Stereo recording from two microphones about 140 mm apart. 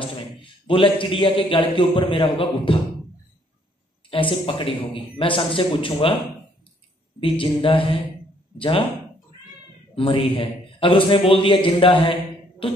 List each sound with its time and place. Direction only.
0.0 s a man's voice: 40° left (ahead or behind)
4.1 s a man's voice: 40° left (ahead or behind)
7.2 s a man's voice: 40° left (ahead or behind)
9.9 s a man's voice: 40° left (ahead or behind)